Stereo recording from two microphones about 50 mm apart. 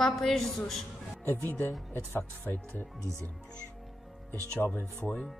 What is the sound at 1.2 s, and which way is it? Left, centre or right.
Speech, left.